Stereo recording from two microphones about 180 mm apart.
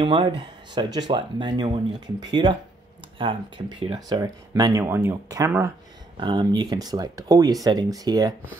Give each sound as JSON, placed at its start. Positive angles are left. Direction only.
{"t": 0.0, "sound": "speech", "side_deg": -30}